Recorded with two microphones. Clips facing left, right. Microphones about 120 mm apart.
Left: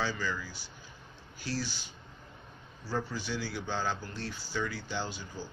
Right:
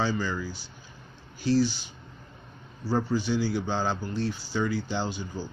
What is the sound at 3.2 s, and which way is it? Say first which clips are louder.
Speech: right 9 dB; 20° right (ahead or behind).